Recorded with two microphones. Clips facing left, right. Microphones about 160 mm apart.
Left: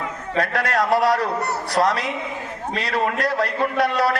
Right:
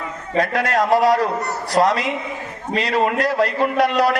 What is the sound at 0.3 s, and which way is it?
A man's voice, 10° right (ahead or behind).